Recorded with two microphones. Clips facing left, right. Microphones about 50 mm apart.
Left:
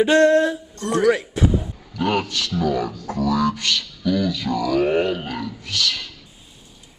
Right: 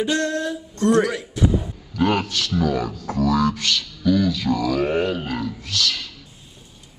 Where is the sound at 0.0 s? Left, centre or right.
Left.